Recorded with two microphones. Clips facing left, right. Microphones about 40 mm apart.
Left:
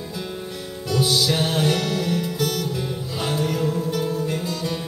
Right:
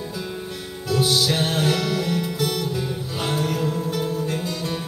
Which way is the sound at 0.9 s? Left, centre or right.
Centre.